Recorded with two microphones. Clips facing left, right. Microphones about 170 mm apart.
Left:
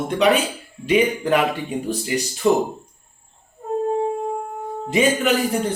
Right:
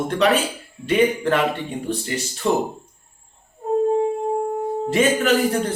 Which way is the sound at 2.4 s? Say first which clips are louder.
Left 3 dB; 5° left (ahead or behind).